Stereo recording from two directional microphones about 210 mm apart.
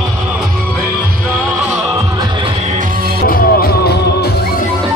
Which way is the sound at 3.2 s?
45° left (ahead or behind).